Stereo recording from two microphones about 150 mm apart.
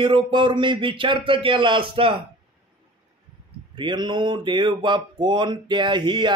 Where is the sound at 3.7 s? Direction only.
30° right (ahead or behind).